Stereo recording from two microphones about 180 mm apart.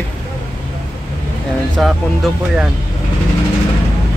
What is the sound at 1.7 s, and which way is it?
Speech, centre (ahead or behind).